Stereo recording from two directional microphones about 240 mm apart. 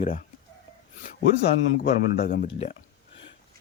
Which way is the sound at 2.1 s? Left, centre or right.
Left.